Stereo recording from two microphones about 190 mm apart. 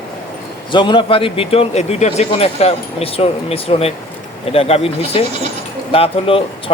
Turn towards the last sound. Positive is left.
turn(degrees=30)  # may be behind; listen again after turning